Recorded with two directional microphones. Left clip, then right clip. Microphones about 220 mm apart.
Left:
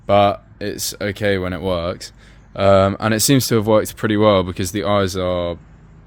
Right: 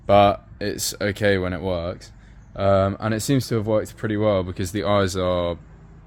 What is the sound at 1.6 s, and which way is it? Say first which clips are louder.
Speech: left 5 dB; 30° left (ahead or behind).